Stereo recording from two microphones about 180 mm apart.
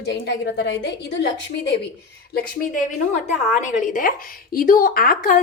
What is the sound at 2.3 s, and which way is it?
A woman's voice, 50° left (ahead or behind).